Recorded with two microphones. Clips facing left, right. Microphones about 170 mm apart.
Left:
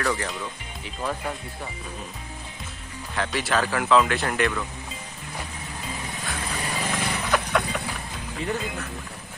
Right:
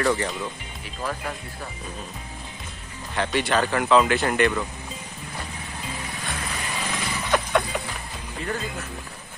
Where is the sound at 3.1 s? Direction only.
Centre (ahead or behind).